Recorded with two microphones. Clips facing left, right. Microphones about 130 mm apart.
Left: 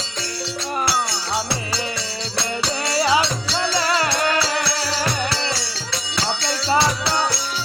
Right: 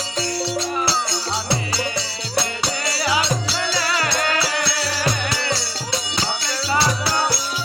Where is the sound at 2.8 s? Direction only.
25° left (ahead or behind).